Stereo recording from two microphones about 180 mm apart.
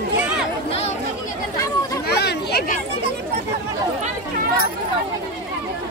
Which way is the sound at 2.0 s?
65° left (ahead or behind).